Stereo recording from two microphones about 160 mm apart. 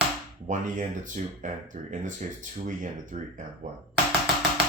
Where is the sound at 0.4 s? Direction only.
50° right (ahead or behind).